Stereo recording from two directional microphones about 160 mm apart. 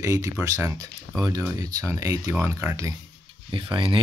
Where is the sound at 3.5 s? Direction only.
30° right (ahead or behind).